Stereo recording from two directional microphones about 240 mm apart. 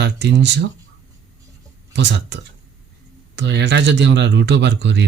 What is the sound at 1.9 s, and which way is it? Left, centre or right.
Speech, right.